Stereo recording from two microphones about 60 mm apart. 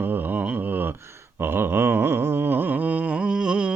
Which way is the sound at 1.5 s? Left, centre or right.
Right.